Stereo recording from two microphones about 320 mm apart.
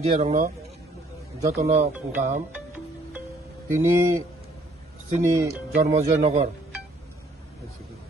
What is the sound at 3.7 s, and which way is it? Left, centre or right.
Speech, centre.